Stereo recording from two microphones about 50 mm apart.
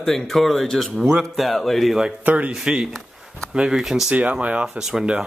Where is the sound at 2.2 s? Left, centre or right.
Right.